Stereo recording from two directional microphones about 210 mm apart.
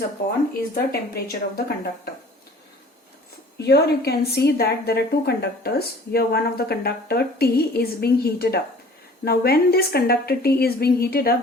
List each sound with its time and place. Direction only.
0.7 s a woman's voice: 45° left (ahead or behind)
3.7 s a woman's voice: 50° left (ahead or behind)